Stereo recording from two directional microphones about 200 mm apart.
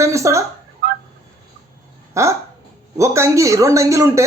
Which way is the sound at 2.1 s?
15° right (ahead or behind).